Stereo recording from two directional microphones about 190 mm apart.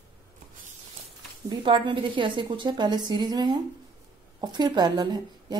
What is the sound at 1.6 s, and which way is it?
A woman's voice, 25° right (ahead or behind).